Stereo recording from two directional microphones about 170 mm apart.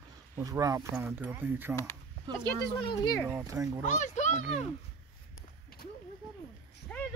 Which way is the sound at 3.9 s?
45° left (ahead or behind).